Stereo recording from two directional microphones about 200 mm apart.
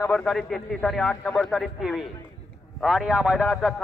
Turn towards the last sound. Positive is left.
turn(degrees=0)  # may be behind; listen again after turning